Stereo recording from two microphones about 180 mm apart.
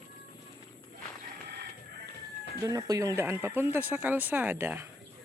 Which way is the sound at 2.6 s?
20° right (ahead or behind).